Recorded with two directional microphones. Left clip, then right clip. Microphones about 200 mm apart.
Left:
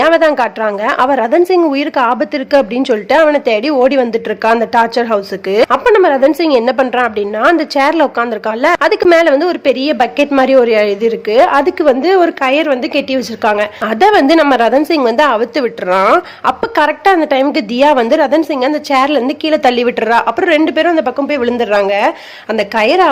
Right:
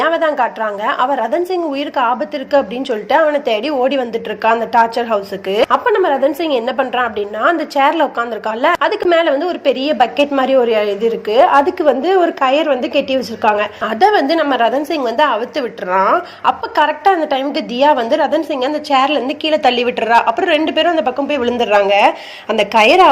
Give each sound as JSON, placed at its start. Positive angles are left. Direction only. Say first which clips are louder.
{"t": 0.0, "sound": "a woman's voice", "louder": "left 5 dB", "side_deg": 30}